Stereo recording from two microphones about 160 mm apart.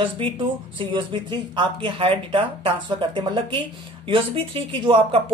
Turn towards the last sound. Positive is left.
turn(degrees=-35)  # may be behind; listen again after turning